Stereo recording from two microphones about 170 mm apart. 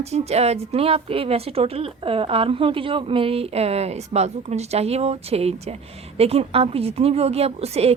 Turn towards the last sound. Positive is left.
turn(degrees=-35)  # may be behind; listen again after turning